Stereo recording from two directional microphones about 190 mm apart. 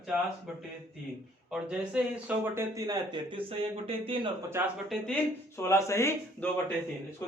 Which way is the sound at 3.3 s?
30° right (ahead or behind).